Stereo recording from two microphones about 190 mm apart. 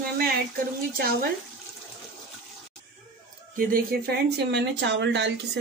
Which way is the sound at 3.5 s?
50° right (ahead or behind).